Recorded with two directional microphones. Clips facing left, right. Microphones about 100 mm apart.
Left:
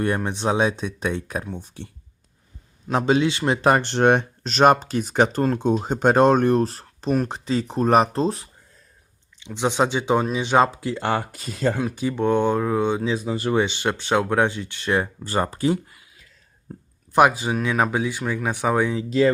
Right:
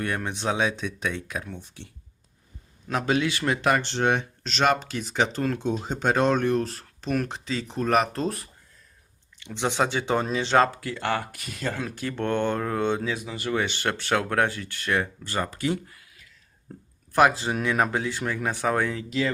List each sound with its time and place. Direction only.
0.0 s speech: 30° left (ahead or behind)
2.9 s speech: 25° left (ahead or behind)
3.8 s speech: 55° left (ahead or behind); by 8.4 s 30° left (ahead or behind)
9.4 s speech: 20° left (ahead or behind)
13.1 s speech: 35° left (ahead or behind)
16.7 s a sound: 10° left (ahead or behind)
17.1 s speech: 15° left (ahead or behind)